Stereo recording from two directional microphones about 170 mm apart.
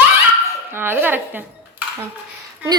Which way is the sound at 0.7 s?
15° right (ahead or behind).